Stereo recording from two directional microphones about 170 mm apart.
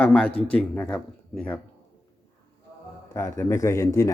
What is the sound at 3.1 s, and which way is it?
Speech, 20° left (ahead or behind).